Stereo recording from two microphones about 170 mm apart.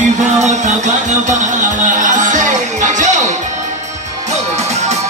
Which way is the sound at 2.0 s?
50° right (ahead or behind).